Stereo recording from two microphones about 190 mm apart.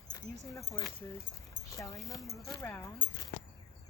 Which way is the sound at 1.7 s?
15° left (ahead or behind).